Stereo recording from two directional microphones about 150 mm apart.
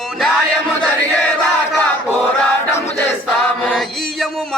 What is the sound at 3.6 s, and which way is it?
Music, 5° left (ahead or behind).